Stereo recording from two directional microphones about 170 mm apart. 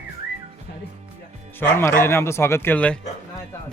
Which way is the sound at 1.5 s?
10° left (ahead or behind).